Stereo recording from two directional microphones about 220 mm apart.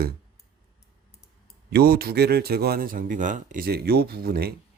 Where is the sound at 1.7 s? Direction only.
45° right (ahead or behind).